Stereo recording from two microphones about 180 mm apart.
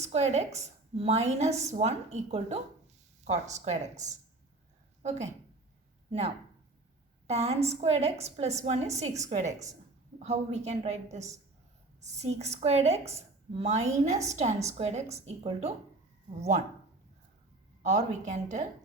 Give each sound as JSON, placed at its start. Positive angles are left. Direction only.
{"t": 0.0, "sound": "a woman's voice", "side_deg": -40}
{"t": 6.1, "sound": "a woman's voice", "side_deg": -35}
{"t": 17.8, "sound": "a woman's voice", "side_deg": -40}